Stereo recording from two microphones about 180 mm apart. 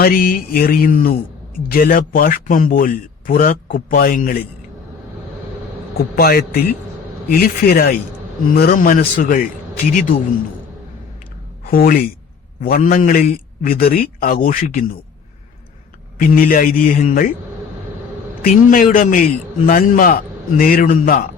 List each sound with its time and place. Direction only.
0.0 s speech: 55° left (ahead or behind)
6.1 s speech: 55° left (ahead or behind)
11.6 s speech: 55° left (ahead or behind)
16.1 s speech: 50° left (ahead or behind)
18.4 s speech: 50° left (ahead or behind)